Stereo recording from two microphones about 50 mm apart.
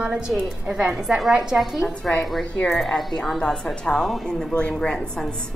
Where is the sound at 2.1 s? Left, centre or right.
Centre.